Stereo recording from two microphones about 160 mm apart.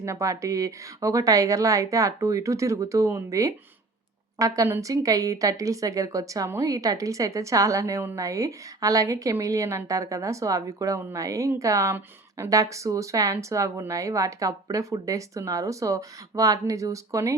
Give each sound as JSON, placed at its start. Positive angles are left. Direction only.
{"t": 0.0, "sound": "a woman's voice", "side_deg": -20}